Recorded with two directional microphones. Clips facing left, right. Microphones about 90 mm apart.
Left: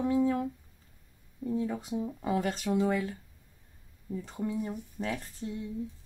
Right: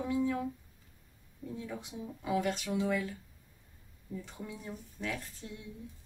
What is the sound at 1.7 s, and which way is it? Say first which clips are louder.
Speech: left 8 dB; 40° left (ahead or behind).